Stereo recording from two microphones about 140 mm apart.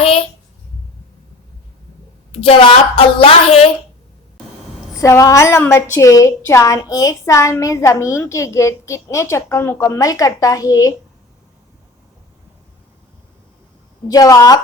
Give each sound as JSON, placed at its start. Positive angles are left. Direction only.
{"t": 2.3, "sound": "a woman's voice", "side_deg": 45}
{"t": 4.9, "sound": "a woman's voice", "side_deg": 20}
{"t": 14.1, "sound": "a woman's voice", "side_deg": 25}